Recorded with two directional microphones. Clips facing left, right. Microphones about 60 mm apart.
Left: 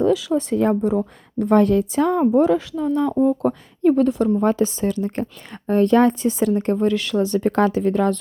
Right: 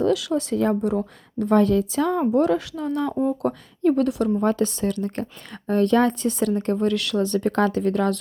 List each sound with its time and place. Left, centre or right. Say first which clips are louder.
0.0 s speech: left 3 dB; centre
2.3 s speech: left 3 dB; centre
5.6 s speech: left 3 dB; left
6.8 s speech: left 3 dB; centre